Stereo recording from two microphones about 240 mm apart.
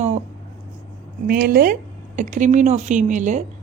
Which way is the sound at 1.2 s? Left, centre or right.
Right.